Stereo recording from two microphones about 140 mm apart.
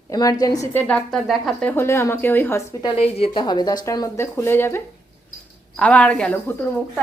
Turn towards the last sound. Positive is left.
turn(degrees=15)  # may be behind; listen again after turning